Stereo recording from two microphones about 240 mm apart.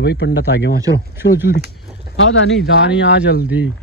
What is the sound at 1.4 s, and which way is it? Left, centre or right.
Speech, left.